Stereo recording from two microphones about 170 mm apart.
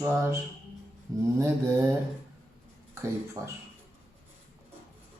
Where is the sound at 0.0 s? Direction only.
15° right (ahead or behind).